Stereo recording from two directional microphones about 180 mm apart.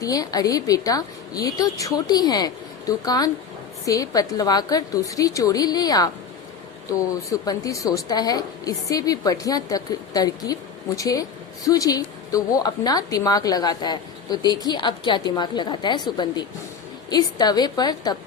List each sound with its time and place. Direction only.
0.0 s a woman's voice: 20° left (ahead or behind)